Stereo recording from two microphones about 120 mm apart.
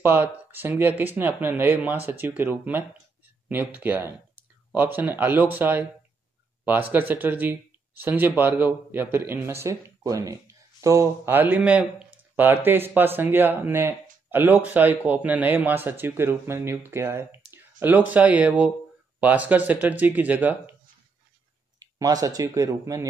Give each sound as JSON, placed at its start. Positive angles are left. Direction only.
{"t": 0.0, "sound": "speech", "side_deg": -15}
{"t": 6.9, "sound": "speech", "side_deg": -15}
{"t": 21.7, "sound": "speech", "side_deg": -30}